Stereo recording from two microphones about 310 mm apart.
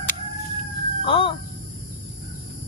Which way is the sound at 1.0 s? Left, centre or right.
Centre.